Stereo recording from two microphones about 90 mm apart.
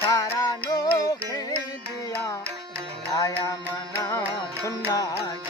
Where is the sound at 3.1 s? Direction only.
35° left (ahead or behind).